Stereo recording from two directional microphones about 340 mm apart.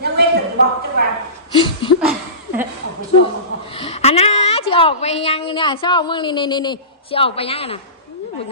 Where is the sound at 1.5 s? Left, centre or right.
Centre.